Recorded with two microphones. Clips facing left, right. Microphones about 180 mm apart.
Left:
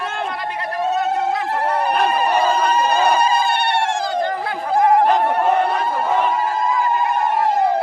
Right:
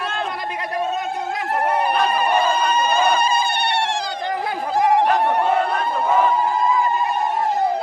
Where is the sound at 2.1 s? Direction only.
40° left (ahead or behind).